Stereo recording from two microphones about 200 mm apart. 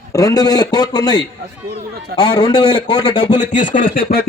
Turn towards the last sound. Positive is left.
turn(degrees=50)  # may be behind; listen again after turning